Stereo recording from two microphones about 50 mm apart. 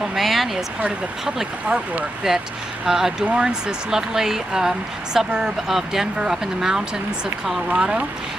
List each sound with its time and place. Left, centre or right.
0.1 s speech: centre
2.2 s speech: centre